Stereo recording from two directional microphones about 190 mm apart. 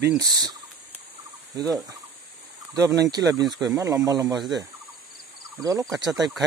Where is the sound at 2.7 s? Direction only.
20° right (ahead or behind).